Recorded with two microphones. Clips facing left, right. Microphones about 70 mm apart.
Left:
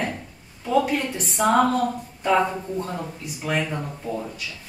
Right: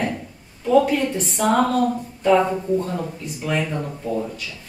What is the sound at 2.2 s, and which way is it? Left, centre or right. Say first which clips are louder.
Speech: right 4 dB; centre.